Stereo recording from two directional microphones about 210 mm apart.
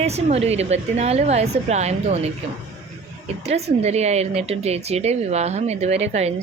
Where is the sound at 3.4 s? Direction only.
30° right (ahead or behind).